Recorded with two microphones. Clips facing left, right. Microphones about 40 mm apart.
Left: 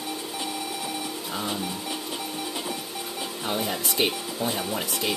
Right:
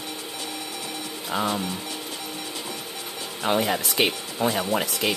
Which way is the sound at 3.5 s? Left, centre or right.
Right.